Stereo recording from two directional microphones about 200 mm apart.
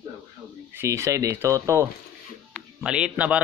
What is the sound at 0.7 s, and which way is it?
A man's voice, 15° right (ahead or behind).